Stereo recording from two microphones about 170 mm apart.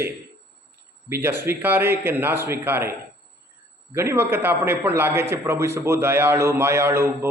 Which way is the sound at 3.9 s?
15° right (ahead or behind).